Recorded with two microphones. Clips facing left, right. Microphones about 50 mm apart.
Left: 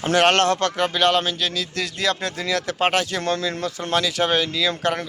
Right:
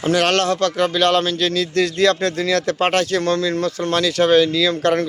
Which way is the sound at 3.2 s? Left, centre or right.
Left.